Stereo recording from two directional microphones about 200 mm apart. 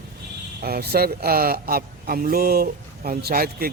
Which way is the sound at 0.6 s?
50° right (ahead or behind).